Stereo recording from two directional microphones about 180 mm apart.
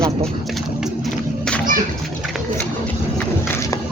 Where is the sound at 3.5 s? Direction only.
15° left (ahead or behind).